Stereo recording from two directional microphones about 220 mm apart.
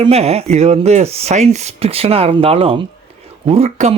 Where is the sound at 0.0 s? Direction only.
30° right (ahead or behind).